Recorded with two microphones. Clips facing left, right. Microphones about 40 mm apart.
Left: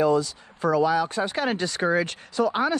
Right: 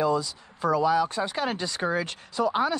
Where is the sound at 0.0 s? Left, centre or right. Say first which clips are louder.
Left 4 dB; left.